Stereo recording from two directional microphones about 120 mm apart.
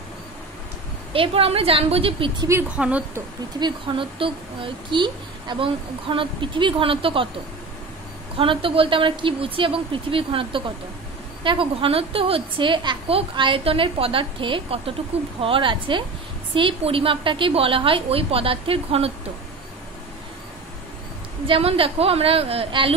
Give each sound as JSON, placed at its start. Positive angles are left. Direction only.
{"t": 1.1, "sound": "a woman's voice", "side_deg": -50}
{"t": 2.7, "sound": "a woman's voice", "side_deg": -10}
{"t": 3.5, "sound": "a woman's voice", "side_deg": -40}
{"t": 8.4, "sound": "a woman's voice", "side_deg": -50}
{"t": 21.5, "sound": "a woman's voice", "side_deg": -50}